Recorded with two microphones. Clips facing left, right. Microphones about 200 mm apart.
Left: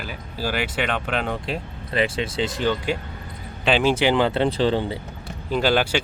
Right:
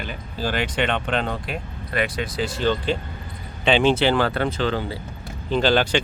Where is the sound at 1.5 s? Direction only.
25° left (ahead or behind).